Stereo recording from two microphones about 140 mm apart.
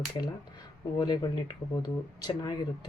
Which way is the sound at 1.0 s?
30° left (ahead or behind).